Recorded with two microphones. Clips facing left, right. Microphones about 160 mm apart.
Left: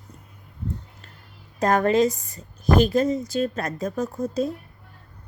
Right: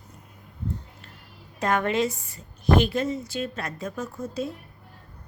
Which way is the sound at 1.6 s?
40° left (ahead or behind).